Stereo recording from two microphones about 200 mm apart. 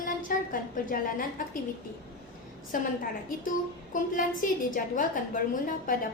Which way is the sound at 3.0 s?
45° left (ahead or behind).